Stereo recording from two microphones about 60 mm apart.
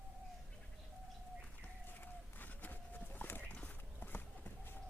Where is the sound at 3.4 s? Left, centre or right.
Left.